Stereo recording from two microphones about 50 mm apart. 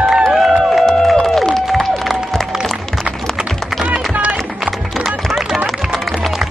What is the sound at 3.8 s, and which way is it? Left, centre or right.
Music, right.